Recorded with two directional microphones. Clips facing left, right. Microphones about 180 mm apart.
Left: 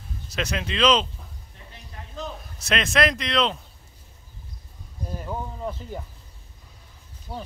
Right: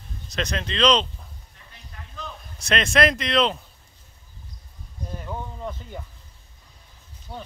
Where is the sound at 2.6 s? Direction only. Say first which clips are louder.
Right 2 dB; centre (ahead or behind).